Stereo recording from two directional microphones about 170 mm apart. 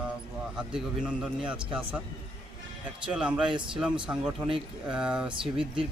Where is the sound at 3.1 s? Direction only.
5° right (ahead or behind).